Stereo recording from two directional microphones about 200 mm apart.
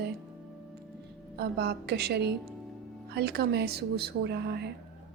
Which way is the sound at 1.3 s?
55° right (ahead or behind).